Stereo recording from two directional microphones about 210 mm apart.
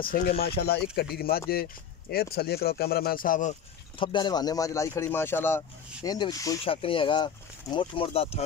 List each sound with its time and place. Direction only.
0.0 s speech: 45° left (ahead or behind)
4.0 s speech: 20° left (ahead or behind)